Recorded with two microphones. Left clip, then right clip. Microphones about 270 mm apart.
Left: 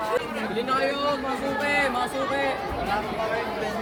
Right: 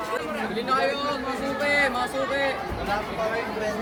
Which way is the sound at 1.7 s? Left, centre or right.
Centre.